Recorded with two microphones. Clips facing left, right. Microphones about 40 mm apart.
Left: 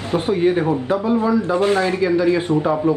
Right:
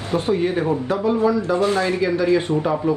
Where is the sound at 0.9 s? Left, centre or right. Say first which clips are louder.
Right 1 dB; centre.